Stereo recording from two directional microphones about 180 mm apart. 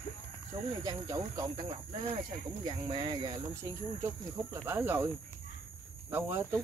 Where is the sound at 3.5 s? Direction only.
15° right (ahead or behind).